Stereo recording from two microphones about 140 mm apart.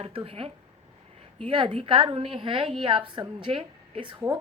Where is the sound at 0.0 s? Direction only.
40° right (ahead or behind).